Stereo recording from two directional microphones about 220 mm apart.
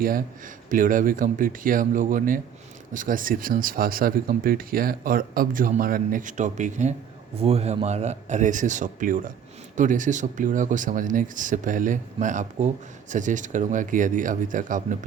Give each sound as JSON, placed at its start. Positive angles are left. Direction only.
{"t": 0.0, "sound": "speech", "side_deg": -40}